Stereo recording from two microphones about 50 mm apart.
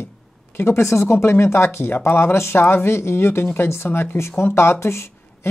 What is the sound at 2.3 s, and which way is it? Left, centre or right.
Speech, left.